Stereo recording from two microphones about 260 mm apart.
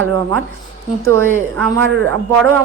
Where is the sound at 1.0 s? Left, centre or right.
Centre.